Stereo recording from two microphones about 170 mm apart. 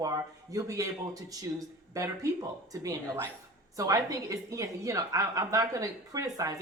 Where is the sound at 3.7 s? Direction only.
20° right (ahead or behind).